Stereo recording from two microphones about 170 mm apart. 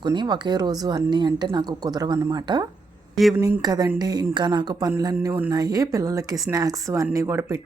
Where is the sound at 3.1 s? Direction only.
Centre (ahead or behind).